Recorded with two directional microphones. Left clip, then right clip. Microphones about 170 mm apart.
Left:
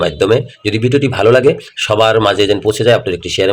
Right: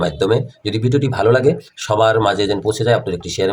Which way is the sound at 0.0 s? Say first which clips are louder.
Left 5 dB; 25° left (ahead or behind).